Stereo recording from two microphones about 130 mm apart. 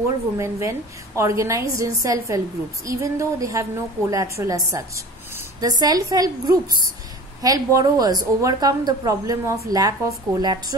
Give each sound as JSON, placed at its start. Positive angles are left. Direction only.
{"t": 0.4, "sound": "a woman's voice", "side_deg": -20}